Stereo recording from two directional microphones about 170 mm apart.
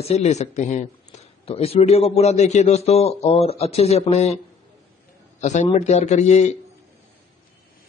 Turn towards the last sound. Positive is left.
turn(degrees=40)  # may be behind; listen again after turning